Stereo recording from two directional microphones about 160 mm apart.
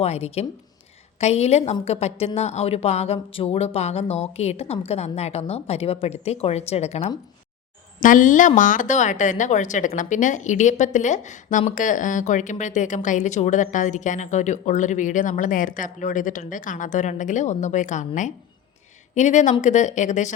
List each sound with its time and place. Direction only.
0.0 s a woman's voice: 40° left (ahead or behind)
8.0 s speech: 55° left (ahead or behind)